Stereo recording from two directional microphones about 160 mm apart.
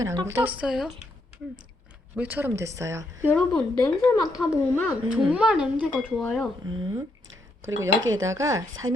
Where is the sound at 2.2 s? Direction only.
10° right (ahead or behind).